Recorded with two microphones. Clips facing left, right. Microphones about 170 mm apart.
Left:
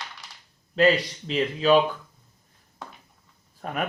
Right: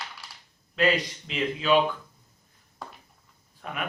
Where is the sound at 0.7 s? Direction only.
35° left (ahead or behind).